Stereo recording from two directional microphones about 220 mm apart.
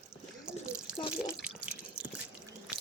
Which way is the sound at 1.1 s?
5° right (ahead or behind).